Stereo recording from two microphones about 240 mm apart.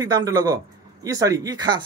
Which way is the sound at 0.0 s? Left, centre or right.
Centre.